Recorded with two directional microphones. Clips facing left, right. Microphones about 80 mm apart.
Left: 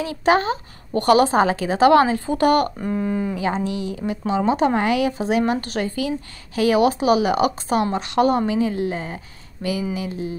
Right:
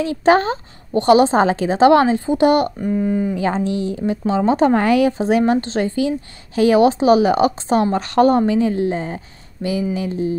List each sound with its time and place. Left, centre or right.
0.0 s speech: right
0.9 s a woman's voice: right
2.8 s speech: centre
3.3 s speech: right